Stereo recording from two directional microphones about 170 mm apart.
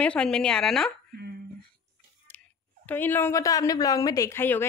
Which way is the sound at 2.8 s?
10° left (ahead or behind).